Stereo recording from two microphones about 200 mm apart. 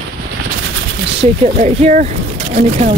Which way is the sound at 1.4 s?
35° right (ahead or behind).